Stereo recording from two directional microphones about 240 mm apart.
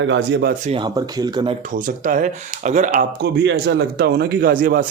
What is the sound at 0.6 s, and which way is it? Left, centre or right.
Speech, right.